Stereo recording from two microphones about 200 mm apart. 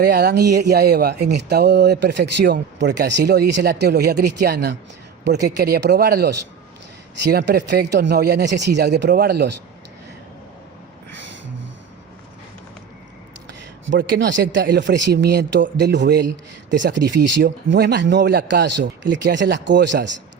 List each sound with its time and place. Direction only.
0.0 s speech: 55° right (ahead or behind)
13.8 s speech: 65° right (ahead or behind)